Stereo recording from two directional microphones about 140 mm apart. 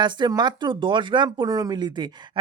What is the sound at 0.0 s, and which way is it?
Speech, 30° right (ahead or behind).